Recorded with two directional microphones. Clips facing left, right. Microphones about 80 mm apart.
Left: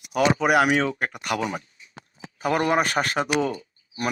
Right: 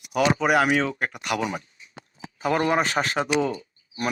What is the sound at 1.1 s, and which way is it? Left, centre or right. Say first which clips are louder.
Speech: even; left.